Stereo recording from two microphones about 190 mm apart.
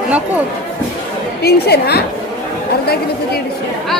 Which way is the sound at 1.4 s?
55° left (ahead or behind).